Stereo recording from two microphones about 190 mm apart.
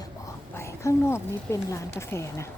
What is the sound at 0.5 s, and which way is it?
A woman's voice, 15° left (ahead or behind).